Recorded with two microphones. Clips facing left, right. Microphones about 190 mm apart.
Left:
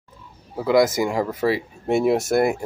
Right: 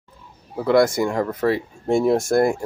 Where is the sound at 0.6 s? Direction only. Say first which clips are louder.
Right 1 dB; 5° left (ahead or behind).